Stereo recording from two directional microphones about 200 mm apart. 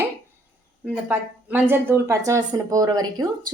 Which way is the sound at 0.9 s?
5° right (ahead or behind).